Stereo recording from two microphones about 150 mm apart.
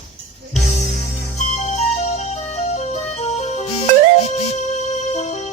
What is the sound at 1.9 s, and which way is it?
Music, 50° left (ahead or behind).